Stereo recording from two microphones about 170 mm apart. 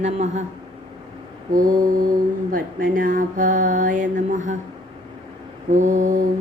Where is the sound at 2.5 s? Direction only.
55° right (ahead or behind).